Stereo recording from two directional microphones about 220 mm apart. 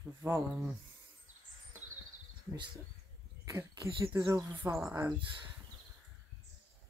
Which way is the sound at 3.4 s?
15° right (ahead or behind).